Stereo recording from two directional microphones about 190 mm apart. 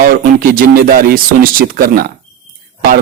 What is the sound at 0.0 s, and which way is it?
Speech, 50° right (ahead or behind).